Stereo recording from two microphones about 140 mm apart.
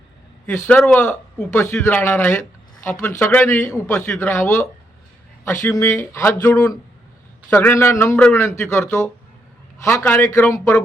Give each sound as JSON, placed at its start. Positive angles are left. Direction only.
{"t": 0.4, "sound": "a man's voice", "side_deg": 10}
{"t": 8.6, "sound": "speech", "side_deg": 5}
{"t": 9.8, "sound": "a man's voice", "side_deg": 20}